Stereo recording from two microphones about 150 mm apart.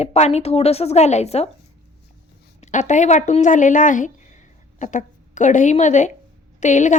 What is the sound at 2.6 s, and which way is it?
A woman's voice, 55° left (ahead or behind).